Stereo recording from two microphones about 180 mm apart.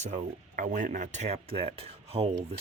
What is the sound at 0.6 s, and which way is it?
Speech, 45° right (ahead or behind).